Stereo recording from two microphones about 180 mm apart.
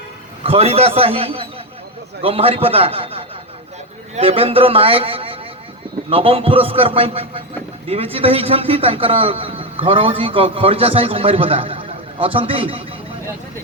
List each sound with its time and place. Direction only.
0.4 s a man's voice: 35° right (ahead or behind)